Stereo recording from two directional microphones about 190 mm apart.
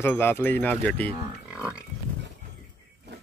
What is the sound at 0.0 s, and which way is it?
Speech, 10° left (ahead or behind).